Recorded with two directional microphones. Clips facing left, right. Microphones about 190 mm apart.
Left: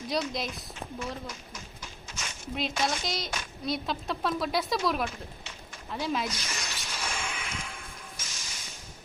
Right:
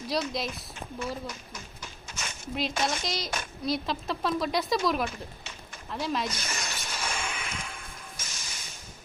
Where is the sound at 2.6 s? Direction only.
Centre (ahead or behind).